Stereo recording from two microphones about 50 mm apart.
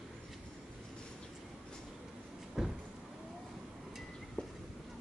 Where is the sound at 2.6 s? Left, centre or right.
Centre.